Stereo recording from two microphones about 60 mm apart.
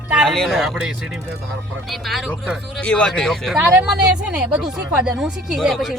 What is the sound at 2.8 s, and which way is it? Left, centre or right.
Speech, centre.